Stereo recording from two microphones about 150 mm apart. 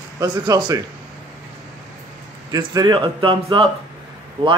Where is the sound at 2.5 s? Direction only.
25° right (ahead or behind).